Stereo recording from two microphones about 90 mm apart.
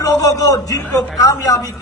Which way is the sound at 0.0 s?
40° left (ahead or behind).